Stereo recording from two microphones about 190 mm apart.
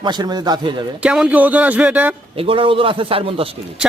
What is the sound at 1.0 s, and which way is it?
Speech, 5° right (ahead or behind).